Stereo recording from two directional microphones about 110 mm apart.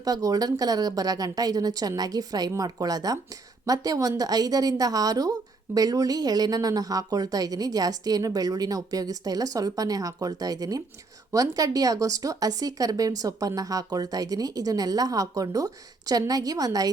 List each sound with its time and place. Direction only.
0.0 s a woman's voice: 35° right (ahead or behind)